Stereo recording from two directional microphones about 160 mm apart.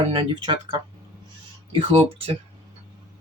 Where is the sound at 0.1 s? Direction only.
30° right (ahead or behind).